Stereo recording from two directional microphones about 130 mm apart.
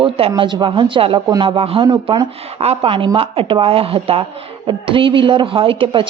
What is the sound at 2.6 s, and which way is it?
Speech, 50° right (ahead or behind).